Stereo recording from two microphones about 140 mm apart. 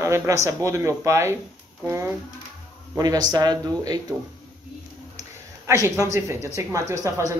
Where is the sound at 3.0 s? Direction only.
30° right (ahead or behind).